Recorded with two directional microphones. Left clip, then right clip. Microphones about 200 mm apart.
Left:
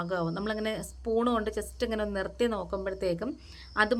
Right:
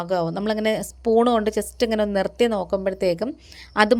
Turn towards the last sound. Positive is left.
turn(degrees=-35)  # may be behind; listen again after turning